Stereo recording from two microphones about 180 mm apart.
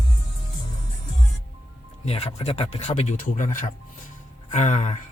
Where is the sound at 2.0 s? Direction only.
35° left (ahead or behind).